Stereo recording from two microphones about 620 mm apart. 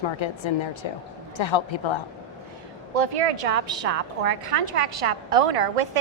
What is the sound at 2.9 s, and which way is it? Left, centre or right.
A woman's voice, right.